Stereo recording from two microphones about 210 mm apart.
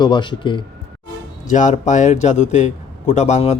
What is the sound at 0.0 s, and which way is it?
Speech, 20° left (ahead or behind).